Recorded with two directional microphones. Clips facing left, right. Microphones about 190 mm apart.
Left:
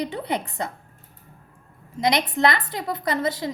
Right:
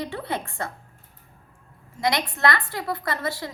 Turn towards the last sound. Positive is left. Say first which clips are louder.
# left 4 dB
turn(degrees=20)  # may be behind; listen again after turning